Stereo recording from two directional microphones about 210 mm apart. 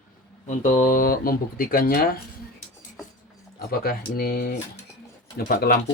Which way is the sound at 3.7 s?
45° left (ahead or behind).